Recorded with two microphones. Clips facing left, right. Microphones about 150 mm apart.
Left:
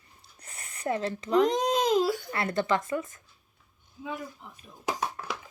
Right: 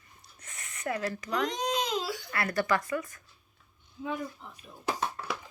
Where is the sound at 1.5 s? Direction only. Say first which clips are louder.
Left 6 dB; 45° left (ahead or behind).